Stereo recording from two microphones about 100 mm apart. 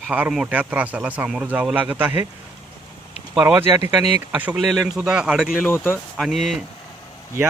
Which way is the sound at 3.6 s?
30° right (ahead or behind).